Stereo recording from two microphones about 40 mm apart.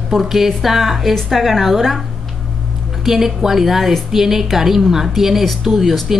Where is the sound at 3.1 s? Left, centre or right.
Centre.